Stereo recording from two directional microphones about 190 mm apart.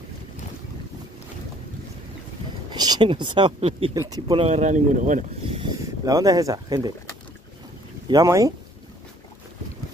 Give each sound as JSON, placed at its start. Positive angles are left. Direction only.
{"t": 2.7, "sound": "speech", "side_deg": -20}
{"t": 4.5, "sound": "speech", "side_deg": -40}
{"t": 5.5, "sound": "speech", "side_deg": -25}
{"t": 8.1, "sound": "speech", "side_deg": -20}